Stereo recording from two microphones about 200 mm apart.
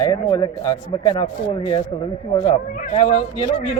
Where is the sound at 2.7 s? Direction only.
40° left (ahead or behind).